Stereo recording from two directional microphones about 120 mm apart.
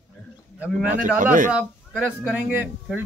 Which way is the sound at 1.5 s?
10° right (ahead or behind).